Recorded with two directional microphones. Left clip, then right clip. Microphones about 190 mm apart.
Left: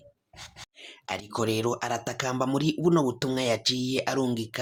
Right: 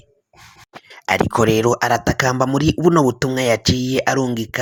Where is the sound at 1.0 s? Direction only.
50° right (ahead or behind).